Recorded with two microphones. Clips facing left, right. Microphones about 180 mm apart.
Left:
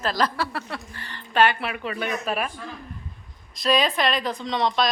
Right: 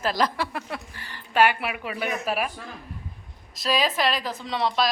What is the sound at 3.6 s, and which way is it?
Speech, 5° right (ahead or behind).